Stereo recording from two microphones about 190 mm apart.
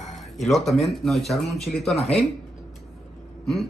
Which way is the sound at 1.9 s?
35° left (ahead or behind).